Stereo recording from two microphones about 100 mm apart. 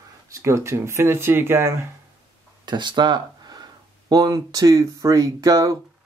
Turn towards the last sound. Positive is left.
turn(degrees=-35)  # may be behind; listen again after turning